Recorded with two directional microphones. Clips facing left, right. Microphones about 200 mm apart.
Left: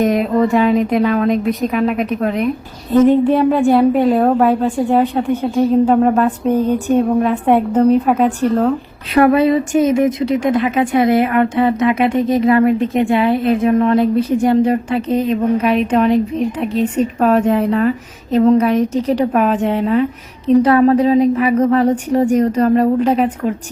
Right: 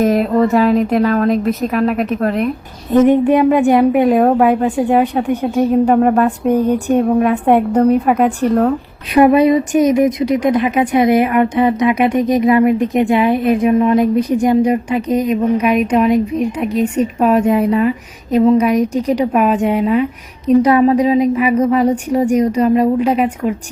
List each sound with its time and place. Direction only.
0.0 s a woman's voice: centre (ahead or behind)
2.9 s speech: 15° right (ahead or behind)
6.5 s speech: 15° right (ahead or behind)